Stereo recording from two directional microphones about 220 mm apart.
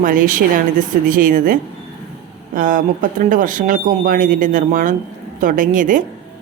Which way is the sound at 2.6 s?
40° right (ahead or behind).